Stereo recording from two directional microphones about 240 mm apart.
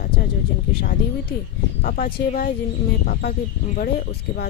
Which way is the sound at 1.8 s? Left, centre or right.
Left.